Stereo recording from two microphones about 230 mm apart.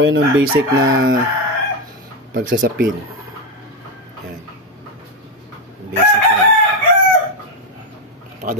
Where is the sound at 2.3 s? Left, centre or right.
Right.